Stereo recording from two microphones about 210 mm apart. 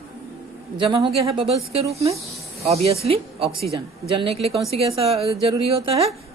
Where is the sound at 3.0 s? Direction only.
25° right (ahead or behind).